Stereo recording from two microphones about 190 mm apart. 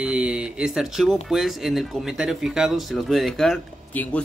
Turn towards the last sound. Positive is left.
turn(degrees=5)  # may be behind; listen again after turning